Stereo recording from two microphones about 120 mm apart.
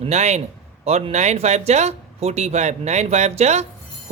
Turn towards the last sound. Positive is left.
turn(degrees=-65)  # may be behind; listen again after turning